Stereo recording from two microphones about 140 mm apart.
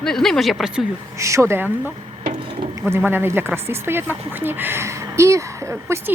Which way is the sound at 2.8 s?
15° right (ahead or behind).